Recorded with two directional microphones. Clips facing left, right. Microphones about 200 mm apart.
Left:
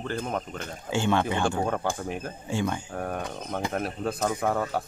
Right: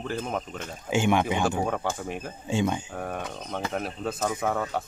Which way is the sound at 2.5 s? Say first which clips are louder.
Right 3 dB; 20° right (ahead or behind).